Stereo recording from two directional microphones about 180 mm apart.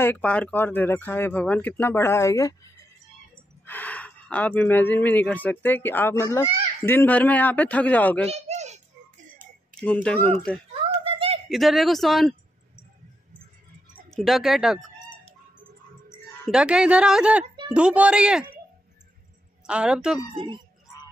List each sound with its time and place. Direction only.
0.0 s speech: 10° left (ahead or behind)
8.3 s a sound: 40° right (ahead or behind)
9.4 s a sound: 50° right (ahead or behind)
10.0 s speech: 10° left (ahead or behind)
11.1 s a sound: 35° right (ahead or behind)
11.4 s speech: centre (ahead or behind)
14.1 s speech: centre (ahead or behind)
16.4 s speech: 5° right (ahead or behind)
19.6 s speech: 5° right (ahead or behind)
20.3 s speech: 25° right (ahead or behind)